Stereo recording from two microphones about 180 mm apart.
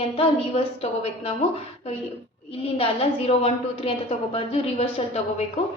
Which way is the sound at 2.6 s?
30° left (ahead or behind).